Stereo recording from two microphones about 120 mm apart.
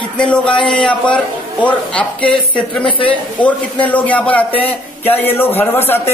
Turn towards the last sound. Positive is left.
turn(degrees=20)  # may be behind; listen again after turning